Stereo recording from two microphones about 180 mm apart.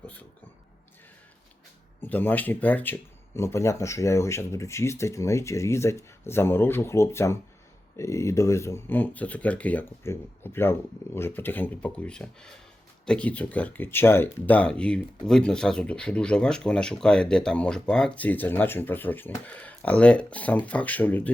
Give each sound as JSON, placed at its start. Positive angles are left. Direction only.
{"t": 2.0, "sound": "speech", "side_deg": 10}